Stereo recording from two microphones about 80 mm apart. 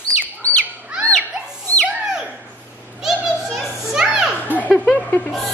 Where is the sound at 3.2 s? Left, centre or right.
Centre.